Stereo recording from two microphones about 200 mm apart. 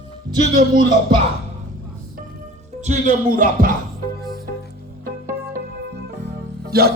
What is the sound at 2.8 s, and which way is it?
Music, 40° right (ahead or behind).